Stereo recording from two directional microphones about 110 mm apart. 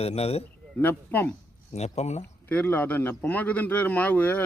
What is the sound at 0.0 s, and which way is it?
Speech, 65° left (ahead or behind).